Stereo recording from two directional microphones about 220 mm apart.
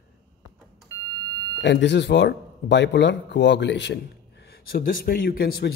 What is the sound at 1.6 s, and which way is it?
Speech, 50° left (ahead or behind).